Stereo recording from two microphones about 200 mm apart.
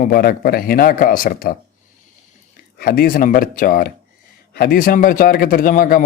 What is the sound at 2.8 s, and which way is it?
Speech, 45° left (ahead or behind).